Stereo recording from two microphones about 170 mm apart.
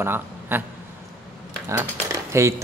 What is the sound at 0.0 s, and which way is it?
Speech, 10° right (ahead or behind).